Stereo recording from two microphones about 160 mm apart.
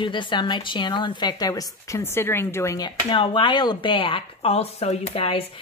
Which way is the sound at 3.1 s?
30° left (ahead or behind).